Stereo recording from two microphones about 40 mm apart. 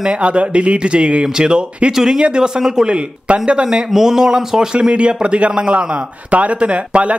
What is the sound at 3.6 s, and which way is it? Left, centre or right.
Speech, centre.